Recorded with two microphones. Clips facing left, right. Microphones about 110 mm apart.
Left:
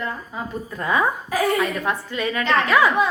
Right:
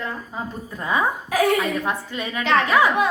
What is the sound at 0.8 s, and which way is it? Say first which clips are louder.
A woman's voice: left 1 dB; 15° right (ahead or behind).